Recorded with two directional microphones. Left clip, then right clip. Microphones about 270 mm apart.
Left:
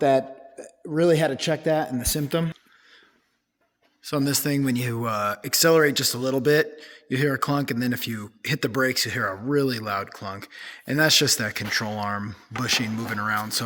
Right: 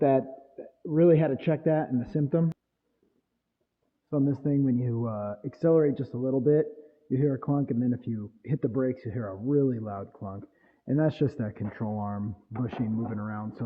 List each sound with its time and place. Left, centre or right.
0.0 s speech: centre
4.1 s speech: centre
6.1 s a man's voice: left
7.1 s speech: centre